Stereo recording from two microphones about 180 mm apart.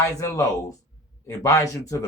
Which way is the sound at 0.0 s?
15° left (ahead or behind).